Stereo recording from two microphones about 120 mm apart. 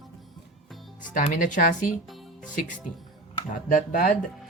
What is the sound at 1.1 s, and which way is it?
Speech, 90° left.